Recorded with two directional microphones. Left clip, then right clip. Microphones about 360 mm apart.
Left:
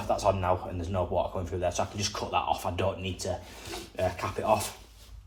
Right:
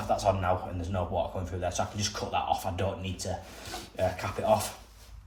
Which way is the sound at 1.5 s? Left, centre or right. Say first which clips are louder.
Left 2 dB; centre.